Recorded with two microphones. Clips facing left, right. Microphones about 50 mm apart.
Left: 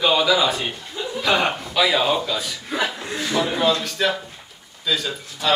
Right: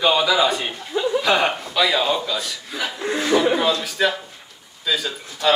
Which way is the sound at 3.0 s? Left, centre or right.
Right.